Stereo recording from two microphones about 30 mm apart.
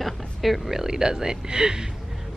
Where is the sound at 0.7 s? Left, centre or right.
Centre.